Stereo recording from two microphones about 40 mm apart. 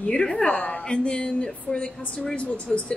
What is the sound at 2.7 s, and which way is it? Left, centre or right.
Speech, centre.